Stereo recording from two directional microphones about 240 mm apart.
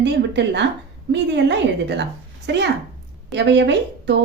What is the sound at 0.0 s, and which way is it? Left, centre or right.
Speech, right.